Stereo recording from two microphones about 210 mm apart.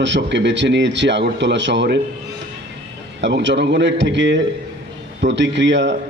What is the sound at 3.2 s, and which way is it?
A man's voice, 55° right (ahead or behind).